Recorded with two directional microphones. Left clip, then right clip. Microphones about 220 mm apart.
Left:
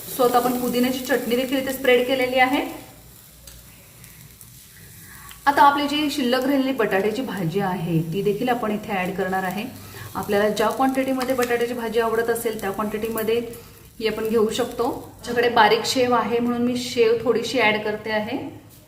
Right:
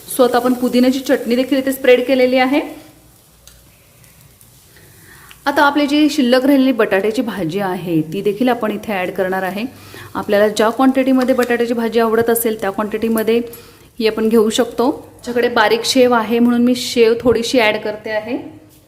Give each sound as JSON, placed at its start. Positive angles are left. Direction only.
{"t": 0.2, "sound": "a woman's voice", "side_deg": -50}
{"t": 5.4, "sound": "a woman's voice", "side_deg": -50}